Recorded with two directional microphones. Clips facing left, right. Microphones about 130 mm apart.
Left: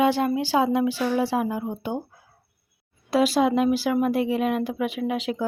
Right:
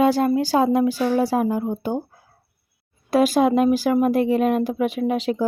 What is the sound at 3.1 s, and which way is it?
Speech, 50° right (ahead or behind).